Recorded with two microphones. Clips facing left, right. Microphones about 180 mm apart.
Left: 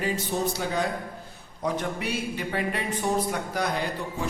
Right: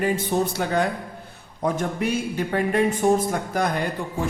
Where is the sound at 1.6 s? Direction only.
45° right (ahead or behind).